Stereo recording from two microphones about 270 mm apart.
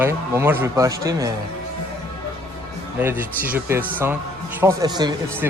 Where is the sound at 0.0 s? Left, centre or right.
Centre.